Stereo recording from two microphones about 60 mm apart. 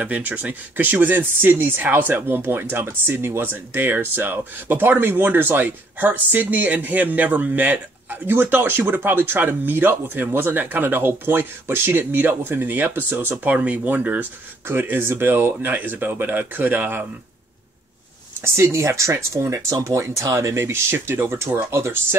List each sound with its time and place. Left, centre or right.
0.0 s speech: right
18.4 s speech: right